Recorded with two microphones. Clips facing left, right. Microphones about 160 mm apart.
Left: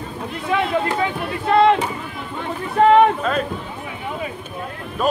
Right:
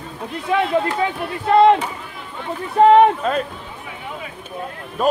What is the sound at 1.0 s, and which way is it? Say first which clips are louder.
Speech: right 1 dB; 35° right (ahead or behind).